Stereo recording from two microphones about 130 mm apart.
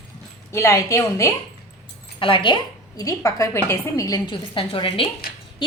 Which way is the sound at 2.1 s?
40° left (ahead or behind).